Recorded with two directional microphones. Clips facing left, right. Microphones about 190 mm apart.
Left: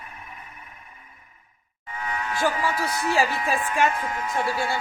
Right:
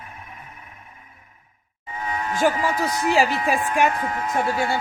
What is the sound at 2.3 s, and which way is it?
Speech, 20° right (ahead or behind).